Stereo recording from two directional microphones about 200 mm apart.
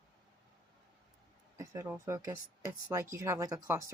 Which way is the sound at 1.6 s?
15° right (ahead or behind).